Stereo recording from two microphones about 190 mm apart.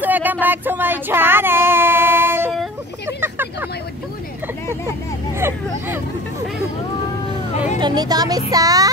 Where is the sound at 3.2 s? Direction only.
10° right (ahead or behind).